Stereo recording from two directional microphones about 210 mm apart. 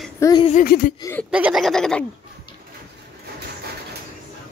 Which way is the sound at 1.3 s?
5° right (ahead or behind).